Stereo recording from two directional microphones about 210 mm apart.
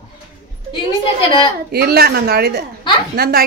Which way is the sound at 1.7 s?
50° right (ahead or behind).